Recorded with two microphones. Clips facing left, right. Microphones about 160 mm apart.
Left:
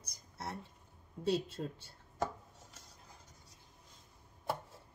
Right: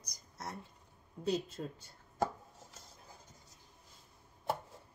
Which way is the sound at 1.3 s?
30° left (ahead or behind).